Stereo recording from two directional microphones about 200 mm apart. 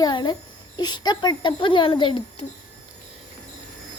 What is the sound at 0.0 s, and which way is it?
Speech, 20° left (ahead or behind).